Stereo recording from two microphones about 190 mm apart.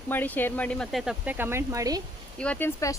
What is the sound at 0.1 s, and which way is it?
Speech, 10° left (ahead or behind).